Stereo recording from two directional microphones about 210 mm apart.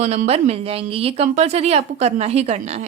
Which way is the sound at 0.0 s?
35° right (ahead or behind).